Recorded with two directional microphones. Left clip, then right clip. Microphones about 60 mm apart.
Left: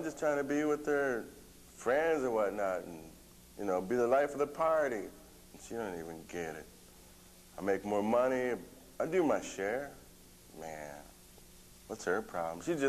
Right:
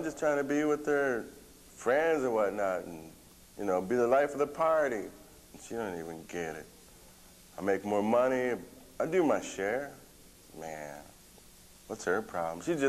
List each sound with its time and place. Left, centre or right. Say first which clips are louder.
0.0 s a man's voice: right 3 dB; left